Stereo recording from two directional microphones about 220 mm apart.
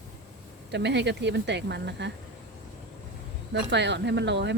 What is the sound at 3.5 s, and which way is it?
Speech, 50° right (ahead or behind).